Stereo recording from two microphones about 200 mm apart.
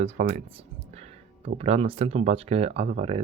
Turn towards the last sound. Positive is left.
turn(degrees=-30)  # may be behind; listen again after turning